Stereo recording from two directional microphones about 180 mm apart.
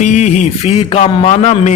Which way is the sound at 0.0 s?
40° left (ahead or behind).